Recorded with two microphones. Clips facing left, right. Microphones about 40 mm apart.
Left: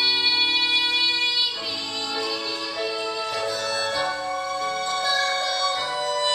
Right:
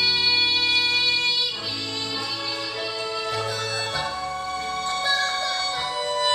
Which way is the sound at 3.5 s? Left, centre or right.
Right.